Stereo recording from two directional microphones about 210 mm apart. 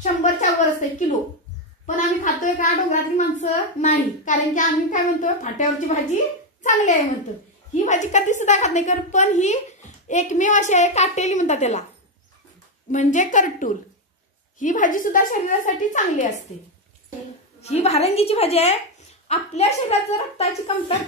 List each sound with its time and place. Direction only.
0.0 s a woman's voice: 35° left (ahead or behind)
12.9 s a woman's voice: 35° left (ahead or behind)
17.6 s a woman's voice: 30° left (ahead or behind)